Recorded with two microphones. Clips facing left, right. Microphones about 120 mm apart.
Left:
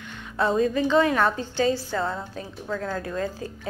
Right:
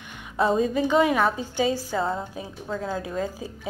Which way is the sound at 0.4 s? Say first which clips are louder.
Even; 10° right (ahead or behind).